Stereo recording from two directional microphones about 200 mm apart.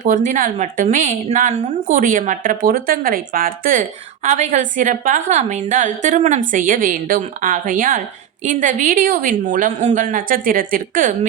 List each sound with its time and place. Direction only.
0.0 s a woman's voice: 40° right (ahead or behind)